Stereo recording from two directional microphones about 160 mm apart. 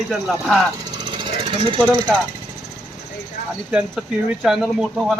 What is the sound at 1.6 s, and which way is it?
Speech, 30° right (ahead or behind).